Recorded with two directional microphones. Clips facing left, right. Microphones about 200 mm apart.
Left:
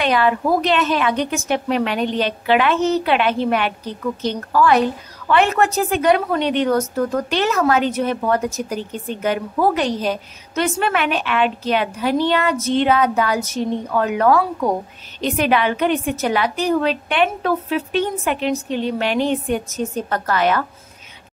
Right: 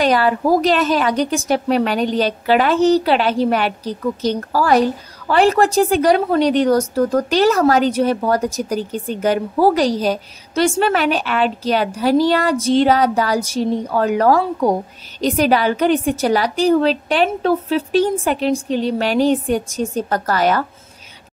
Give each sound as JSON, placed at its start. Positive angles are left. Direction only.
{"t": 0.0, "sound": "a woman's voice", "side_deg": -35}